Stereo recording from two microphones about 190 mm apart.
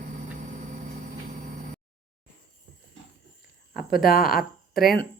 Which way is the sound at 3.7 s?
50° left (ahead or behind).